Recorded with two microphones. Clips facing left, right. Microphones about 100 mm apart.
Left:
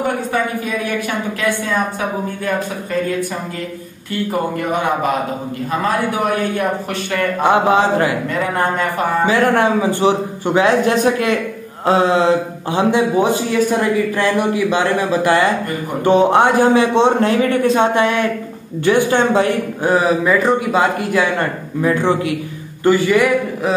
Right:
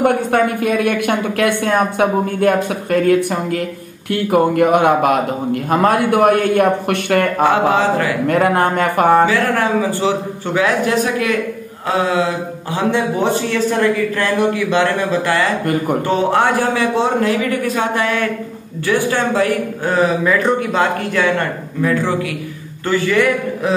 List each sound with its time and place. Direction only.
0.0 s a man's voice: 60° right (ahead or behind)
7.4 s a man's voice: 20° left (ahead or behind)
8.3 s a man's voice: 60° right (ahead or behind)
9.2 s a man's voice: 20° left (ahead or behind)
20.2 s speech: 5° left (ahead or behind)